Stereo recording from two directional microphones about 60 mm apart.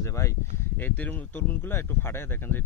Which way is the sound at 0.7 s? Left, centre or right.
Left.